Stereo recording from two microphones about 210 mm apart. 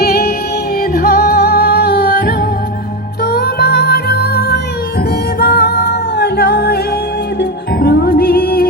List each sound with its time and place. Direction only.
0.0 s music: 50° left (ahead or behind)